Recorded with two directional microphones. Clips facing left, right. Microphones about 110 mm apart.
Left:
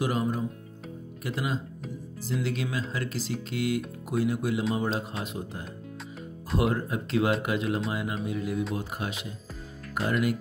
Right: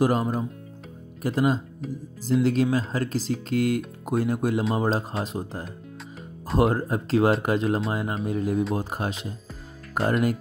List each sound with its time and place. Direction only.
0.0 s speech: 35° right (ahead or behind)
1.8 s speech: centre (ahead or behind)
2.4 s speech: 40° right (ahead or behind)